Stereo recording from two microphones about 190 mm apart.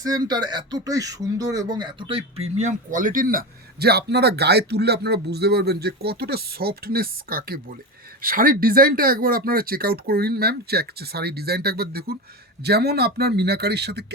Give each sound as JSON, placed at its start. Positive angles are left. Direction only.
{"t": 0.0, "sound": "speech", "side_deg": -20}